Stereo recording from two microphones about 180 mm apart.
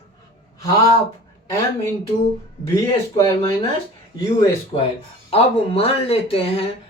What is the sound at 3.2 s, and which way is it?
Speech, 20° left (ahead or behind).